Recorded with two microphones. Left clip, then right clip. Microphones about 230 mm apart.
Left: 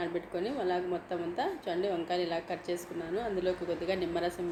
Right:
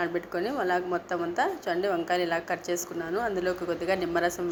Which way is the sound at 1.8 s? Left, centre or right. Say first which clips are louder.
Right 5 dB; right.